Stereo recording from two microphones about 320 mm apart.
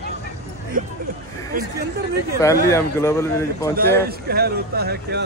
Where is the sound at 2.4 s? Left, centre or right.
Centre.